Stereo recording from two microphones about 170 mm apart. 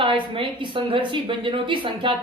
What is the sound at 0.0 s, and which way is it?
A woman's voice, 30° right (ahead or behind).